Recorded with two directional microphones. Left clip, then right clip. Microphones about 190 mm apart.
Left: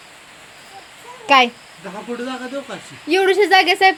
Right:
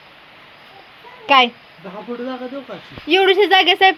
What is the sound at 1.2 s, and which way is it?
Speech, 10° left (ahead or behind).